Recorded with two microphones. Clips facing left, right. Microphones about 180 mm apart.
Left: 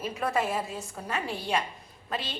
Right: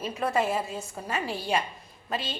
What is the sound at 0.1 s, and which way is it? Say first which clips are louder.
A woman's voice: right 3 dB; centre (ahead or behind).